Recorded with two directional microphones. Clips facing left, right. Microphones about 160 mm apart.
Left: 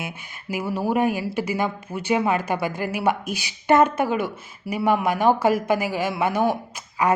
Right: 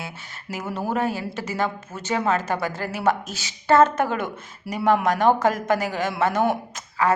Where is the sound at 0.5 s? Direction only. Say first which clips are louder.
Left 3 dB; 10° left (ahead or behind).